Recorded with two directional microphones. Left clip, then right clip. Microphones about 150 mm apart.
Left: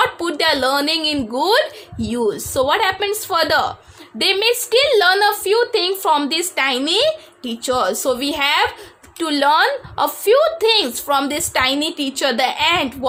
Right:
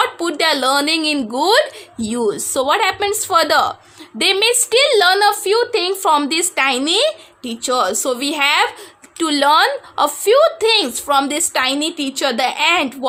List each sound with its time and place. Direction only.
0.0 s a woman's voice: 20° right (ahead or behind)